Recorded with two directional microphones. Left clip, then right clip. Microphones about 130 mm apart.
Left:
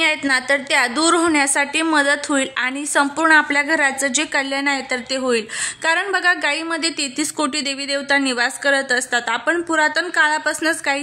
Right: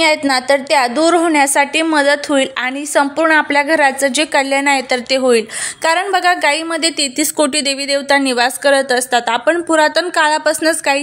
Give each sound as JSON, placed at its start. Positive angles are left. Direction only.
{"t": 0.7, "sound": "a woman's voice", "side_deg": -15}